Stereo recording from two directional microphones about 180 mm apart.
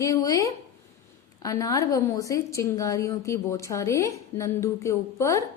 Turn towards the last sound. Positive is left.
turn(degrees=15)  # may be behind; listen again after turning